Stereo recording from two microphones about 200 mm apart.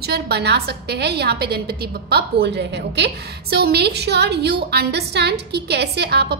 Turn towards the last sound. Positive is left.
turn(degrees=-55)  # may be behind; listen again after turning